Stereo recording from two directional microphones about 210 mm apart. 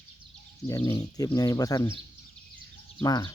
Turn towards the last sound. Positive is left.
turn(degrees=20)  # may be behind; listen again after turning